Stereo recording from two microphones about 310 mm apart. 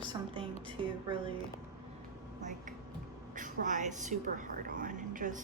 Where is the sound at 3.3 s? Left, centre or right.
Right.